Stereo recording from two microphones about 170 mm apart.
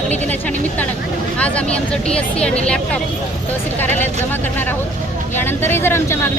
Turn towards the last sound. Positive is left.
turn(degrees=15)  # may be behind; listen again after turning